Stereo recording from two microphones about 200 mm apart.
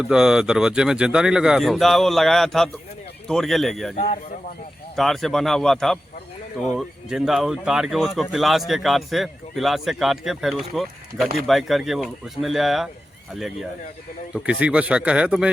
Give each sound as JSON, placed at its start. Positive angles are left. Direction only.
{"t": 0.0, "sound": "speech", "side_deg": -5}
{"t": 3.9, "sound": "a man's voice", "side_deg": 35}
{"t": 4.9, "sound": "speech", "side_deg": 0}
{"t": 14.3, "sound": "speech", "side_deg": -5}